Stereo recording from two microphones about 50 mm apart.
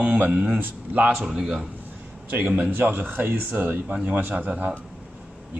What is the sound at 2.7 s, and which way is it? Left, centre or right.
Speech, right.